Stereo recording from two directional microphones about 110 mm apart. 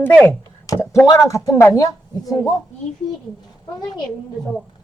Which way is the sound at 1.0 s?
30° left (ahead or behind).